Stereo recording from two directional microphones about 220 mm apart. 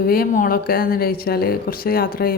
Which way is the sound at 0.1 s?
40° left (ahead or behind).